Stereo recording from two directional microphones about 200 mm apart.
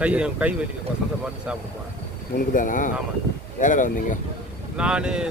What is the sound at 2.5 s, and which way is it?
Speech, 40° left (ahead or behind).